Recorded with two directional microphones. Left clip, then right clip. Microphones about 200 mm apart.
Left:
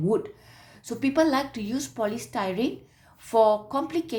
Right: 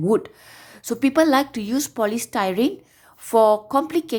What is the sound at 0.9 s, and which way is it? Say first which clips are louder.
A woman's voice: right 5 dB; 40° right (ahead or behind).